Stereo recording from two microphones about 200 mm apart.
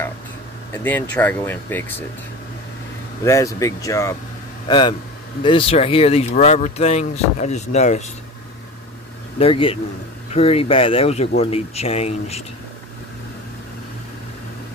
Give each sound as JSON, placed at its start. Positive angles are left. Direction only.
{"t": 1.1, "sound": "speech", "side_deg": 10}
{"t": 3.3, "sound": "a man's voice", "side_deg": 15}
{"t": 9.4, "sound": "a man's voice", "side_deg": 25}